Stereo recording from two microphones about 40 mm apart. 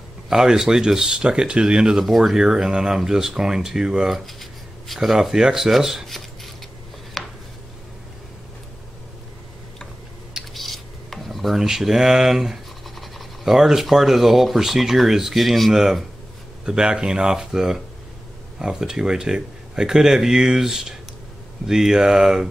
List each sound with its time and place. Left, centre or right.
0.3 s speech: centre
2.0 s speech: centre
2.3 s speech: centre
4.3 s a sound: centre
5.1 s speech: centre
6.0 s a sound: centre
10.5 s dishes: centre
11.6 s speech: centre
12.8 s pant: centre
13.5 s speech: centre